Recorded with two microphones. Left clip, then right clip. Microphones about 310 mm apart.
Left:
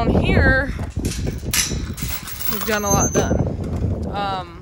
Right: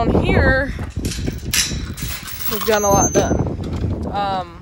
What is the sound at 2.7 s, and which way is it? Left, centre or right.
Speech, centre.